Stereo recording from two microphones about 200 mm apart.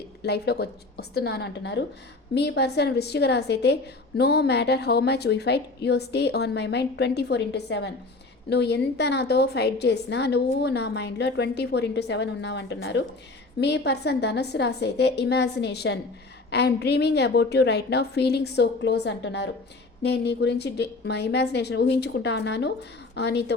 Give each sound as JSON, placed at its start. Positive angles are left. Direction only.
{"t": 0.2, "sound": "a woman's voice", "side_deg": 55}